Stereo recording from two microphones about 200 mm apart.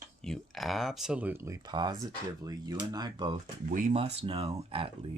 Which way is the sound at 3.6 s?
40° right (ahead or behind).